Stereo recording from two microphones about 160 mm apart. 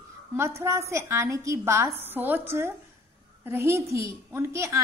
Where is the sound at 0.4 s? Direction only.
15° right (ahead or behind).